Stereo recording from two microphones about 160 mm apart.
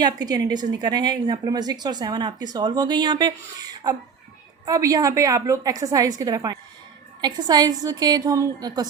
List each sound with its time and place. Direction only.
0.0 s a woman's voice: 25° right (ahead or behind)